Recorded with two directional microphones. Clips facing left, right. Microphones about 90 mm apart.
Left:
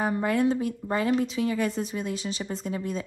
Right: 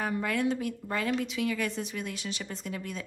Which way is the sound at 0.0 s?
30° left (ahead or behind).